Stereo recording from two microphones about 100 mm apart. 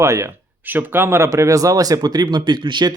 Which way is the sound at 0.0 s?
30° right (ahead or behind).